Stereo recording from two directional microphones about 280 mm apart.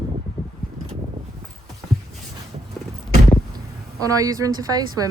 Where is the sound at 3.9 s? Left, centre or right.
Centre.